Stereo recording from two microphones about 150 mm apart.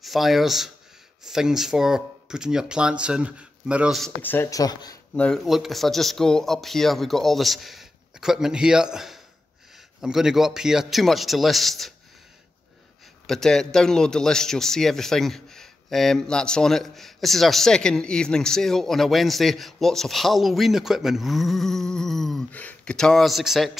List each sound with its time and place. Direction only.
0.0 s a man's voice: centre (ahead or behind)
4.2 s speech: 15° left (ahead or behind)
5.1 s a man's voice: 5° left (ahead or behind)
13.3 s a man's voice: 5° left (ahead or behind)